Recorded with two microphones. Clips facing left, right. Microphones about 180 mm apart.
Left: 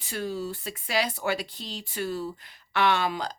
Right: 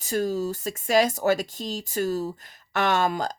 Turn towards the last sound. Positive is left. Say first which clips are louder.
# right 2 dB
turn(degrees=-45)  # may be behind; listen again after turning